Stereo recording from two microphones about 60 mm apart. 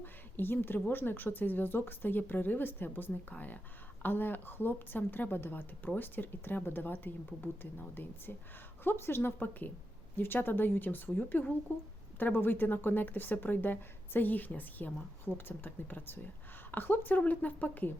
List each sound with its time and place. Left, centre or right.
0.0 s a woman's voice: left
9.4 s a woman's voice: left